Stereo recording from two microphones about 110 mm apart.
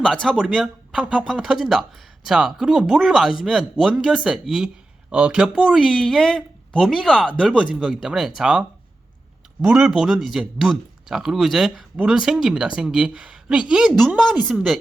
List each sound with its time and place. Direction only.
0.0 s speech: centre (ahead or behind)